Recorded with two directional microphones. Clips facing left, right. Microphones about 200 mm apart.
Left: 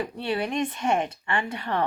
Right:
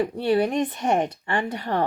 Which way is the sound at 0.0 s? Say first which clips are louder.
Right 7 dB; 35° right (ahead or behind).